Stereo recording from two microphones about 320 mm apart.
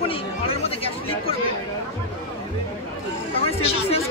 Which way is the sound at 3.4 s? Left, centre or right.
Centre.